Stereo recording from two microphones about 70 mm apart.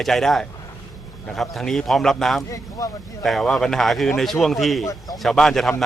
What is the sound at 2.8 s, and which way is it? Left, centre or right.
Speech, left.